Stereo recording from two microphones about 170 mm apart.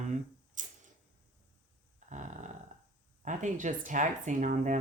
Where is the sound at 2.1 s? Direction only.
45° right (ahead or behind).